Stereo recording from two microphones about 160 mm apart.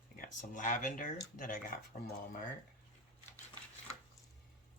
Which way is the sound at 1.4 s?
60° left (ahead or behind).